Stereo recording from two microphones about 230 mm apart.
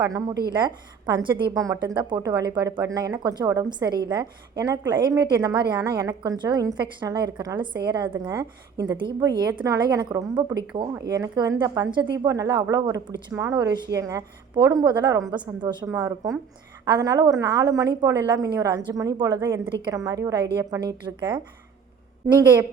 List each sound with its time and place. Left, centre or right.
0.0 s a woman's voice: centre